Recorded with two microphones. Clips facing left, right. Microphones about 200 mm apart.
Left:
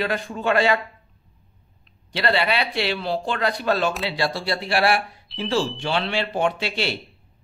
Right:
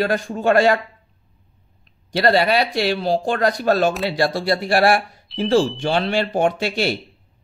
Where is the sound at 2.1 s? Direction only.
40° right (ahead or behind).